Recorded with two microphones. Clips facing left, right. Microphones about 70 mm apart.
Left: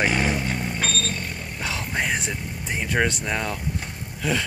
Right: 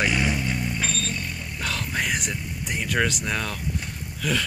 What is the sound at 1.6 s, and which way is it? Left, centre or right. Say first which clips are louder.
Vehicle: left 1 dB; centre.